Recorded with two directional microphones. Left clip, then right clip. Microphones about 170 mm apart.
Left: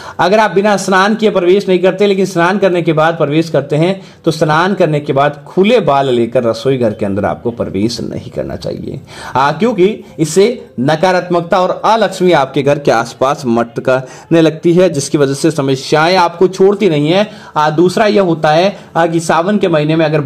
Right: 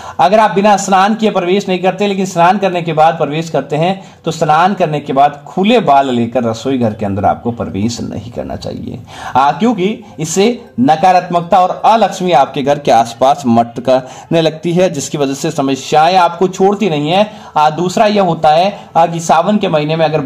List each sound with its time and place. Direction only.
0.2 s a man's voice: 20° left (ahead or behind)
9.3 s a man's voice: 20° left (ahead or behind)